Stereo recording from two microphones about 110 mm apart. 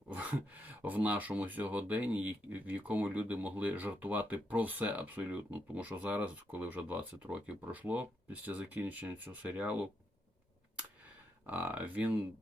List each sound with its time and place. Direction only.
0.1 s speech: 15° right (ahead or behind)
11.4 s speech: 15° right (ahead or behind)